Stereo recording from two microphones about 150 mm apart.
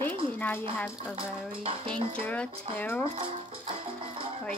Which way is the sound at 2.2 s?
10° left (ahead or behind).